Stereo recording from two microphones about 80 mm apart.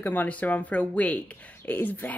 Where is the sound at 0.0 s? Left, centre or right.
Left.